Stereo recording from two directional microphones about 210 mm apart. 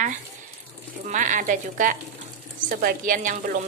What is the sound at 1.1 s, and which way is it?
Speech, 35° right (ahead or behind).